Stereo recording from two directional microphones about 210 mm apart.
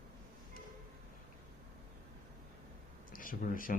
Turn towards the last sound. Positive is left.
turn(degrees=40)  # may be behind; listen again after turning